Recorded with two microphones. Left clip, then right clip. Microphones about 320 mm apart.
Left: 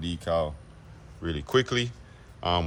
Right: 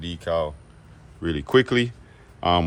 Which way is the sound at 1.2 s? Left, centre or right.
Right.